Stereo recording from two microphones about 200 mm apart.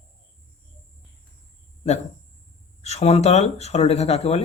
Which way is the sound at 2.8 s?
30° left (ahead or behind).